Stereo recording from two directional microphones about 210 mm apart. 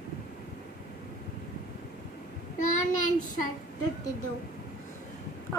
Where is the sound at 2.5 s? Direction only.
35° left (ahead or behind).